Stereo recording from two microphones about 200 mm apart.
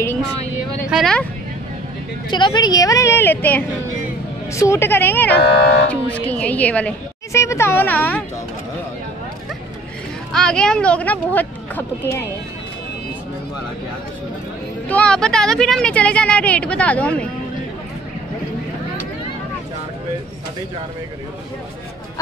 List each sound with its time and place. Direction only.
0.8 s speech: centre (ahead or behind)
2.2 s a woman's voice: 25° left (ahead or behind)
5.4 s speech: 55° left (ahead or behind)
5.9 s a woman's voice: 5° left (ahead or behind)
10.3 s a woman's voice: 5° left (ahead or behind)
14.9 s speech: 5° left (ahead or behind)